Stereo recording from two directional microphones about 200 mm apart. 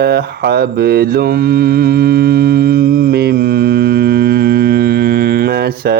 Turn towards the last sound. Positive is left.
turn(degrees=-50)  # may be behind; listen again after turning